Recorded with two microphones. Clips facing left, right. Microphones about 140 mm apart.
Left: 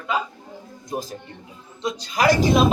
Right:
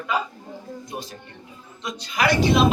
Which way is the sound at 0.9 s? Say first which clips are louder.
Left 5 dB; 40° left (ahead or behind).